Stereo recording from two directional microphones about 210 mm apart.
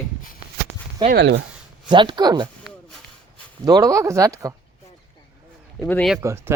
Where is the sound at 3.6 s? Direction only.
15° right (ahead or behind).